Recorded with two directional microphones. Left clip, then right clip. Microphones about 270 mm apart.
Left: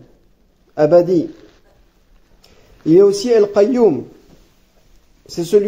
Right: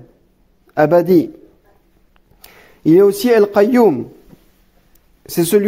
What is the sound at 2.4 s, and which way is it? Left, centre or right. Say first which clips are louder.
Speech: right 4 dB; right.